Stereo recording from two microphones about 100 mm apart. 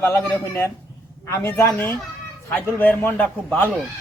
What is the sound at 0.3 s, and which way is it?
A woman's voice, 20° left (ahead or behind).